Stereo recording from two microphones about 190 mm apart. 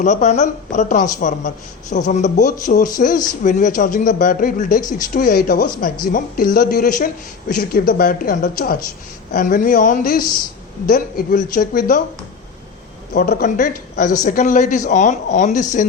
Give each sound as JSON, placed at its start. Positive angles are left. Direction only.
{"t": 0.0, "sound": "speech", "side_deg": 40}
{"t": 13.1, "sound": "speech", "side_deg": 50}